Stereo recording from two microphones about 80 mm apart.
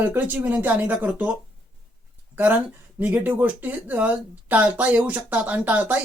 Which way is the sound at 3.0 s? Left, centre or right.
Centre.